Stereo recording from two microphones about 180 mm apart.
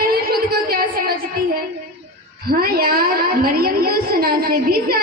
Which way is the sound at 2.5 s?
55° right (ahead or behind).